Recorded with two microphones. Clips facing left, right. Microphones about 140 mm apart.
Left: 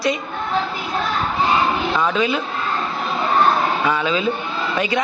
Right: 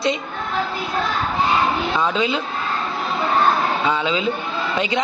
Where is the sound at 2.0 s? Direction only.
20° right (ahead or behind).